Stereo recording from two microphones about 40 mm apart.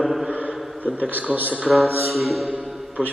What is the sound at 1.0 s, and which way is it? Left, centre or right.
Speech, right.